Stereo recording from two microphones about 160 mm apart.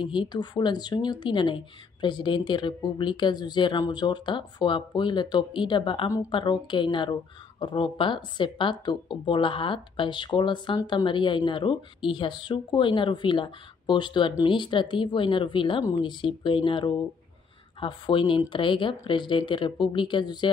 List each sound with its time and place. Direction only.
0.0 s speech: 30° left (ahead or behind)